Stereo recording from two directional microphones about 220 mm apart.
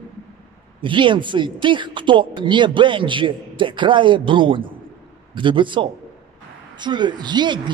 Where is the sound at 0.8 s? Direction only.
20° right (ahead or behind).